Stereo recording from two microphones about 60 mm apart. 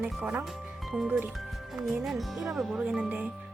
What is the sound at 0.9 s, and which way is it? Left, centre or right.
Speech, centre.